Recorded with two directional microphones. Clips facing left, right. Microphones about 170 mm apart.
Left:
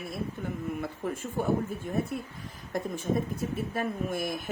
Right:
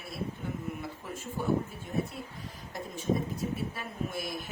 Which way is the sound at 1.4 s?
55° left (ahead or behind).